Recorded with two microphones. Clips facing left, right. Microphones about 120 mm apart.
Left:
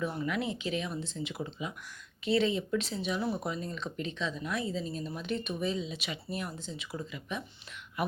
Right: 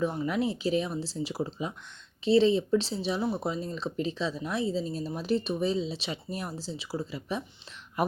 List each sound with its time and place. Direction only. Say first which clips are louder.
0.0 s speech: right 5 dB; 20° right (ahead or behind)
0.3 s speech: right 5 dB; 35° right (ahead or behind)